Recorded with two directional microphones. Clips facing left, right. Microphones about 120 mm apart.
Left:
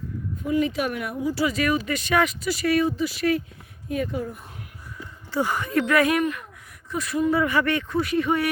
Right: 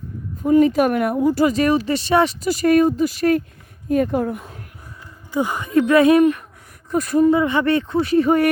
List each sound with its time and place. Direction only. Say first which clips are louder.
0.4 s speech: right 9 dB; 45° right (ahead or behind); by 4.4 s 70° right (ahead or behind)
5.3 s speech: right 5 dB; 20° right (ahead or behind); by 7.3 s 45° right (ahead or behind)
7.3 s speech: right 5 dB; 25° right (ahead or behind); by 8.4 s 40° right (ahead or behind)